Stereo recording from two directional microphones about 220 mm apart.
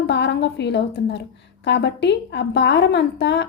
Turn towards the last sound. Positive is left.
turn(degrees=50)  # may be behind; listen again after turning